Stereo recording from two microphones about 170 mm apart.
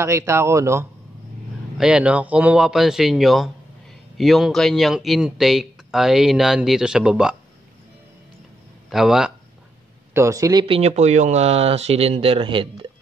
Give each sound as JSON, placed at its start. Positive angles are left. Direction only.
{"t": 0.0, "sound": "speech", "side_deg": -15}
{"t": 1.8, "sound": "speech", "side_deg": -5}
{"t": 8.9, "sound": "speech", "side_deg": -5}
{"t": 10.1, "sound": "speech", "side_deg": -20}
{"t": 10.8, "sound": "speech", "side_deg": -40}